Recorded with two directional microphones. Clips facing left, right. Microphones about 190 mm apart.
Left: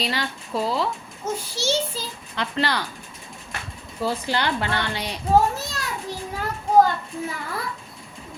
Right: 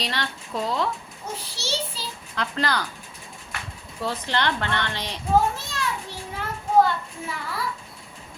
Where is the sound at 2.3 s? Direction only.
Centre (ahead or behind).